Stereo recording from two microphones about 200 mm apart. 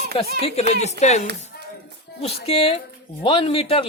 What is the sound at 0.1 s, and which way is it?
A man's voice, 30° left (ahead or behind).